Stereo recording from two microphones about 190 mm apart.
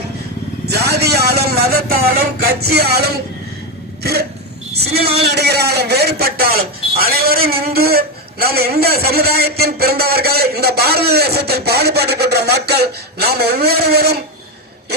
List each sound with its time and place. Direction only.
0.6 s vehicle: 60° right (ahead or behind)
2.4 s a man's voice: 55° right (ahead or behind)